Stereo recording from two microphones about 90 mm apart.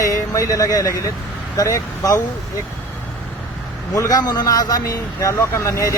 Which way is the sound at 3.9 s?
40° left (ahead or behind).